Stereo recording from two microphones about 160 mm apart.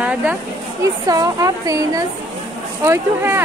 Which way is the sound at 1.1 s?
20° right (ahead or behind).